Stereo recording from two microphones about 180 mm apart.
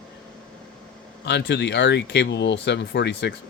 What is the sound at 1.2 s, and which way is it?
A man's voice, 75° left (ahead or behind).